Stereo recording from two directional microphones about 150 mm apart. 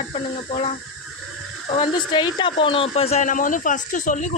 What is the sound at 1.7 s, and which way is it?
Speech, 30° left (ahead or behind).